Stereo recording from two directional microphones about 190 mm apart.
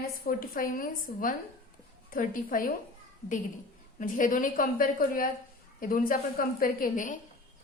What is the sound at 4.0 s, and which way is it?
A woman's voice, 45° left (ahead or behind).